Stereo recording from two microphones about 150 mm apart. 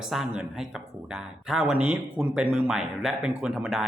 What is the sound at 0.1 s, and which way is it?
Speech, centre (ahead or behind).